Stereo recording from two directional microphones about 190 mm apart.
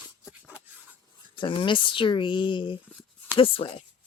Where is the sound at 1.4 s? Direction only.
25° left (ahead or behind).